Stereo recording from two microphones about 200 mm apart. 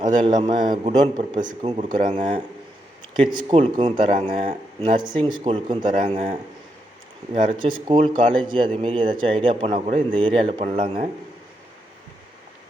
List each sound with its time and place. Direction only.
0.0 s speech: 20° right (ahead or behind)
7.3 s speech: 25° right (ahead or behind)